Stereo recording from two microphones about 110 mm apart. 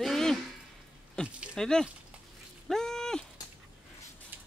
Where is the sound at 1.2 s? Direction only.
10° right (ahead or behind).